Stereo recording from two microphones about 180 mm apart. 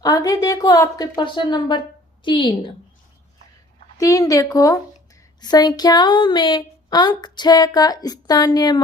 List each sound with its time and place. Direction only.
0.0 s speech: 20° left (ahead or behind)
3.9 s speech: 20° left (ahead or behind)